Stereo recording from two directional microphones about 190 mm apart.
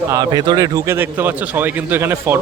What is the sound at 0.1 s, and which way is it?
A man's voice, 20° right (ahead or behind).